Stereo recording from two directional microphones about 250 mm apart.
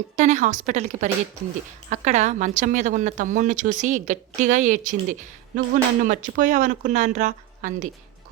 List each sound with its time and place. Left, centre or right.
0.2 s a woman's voice: right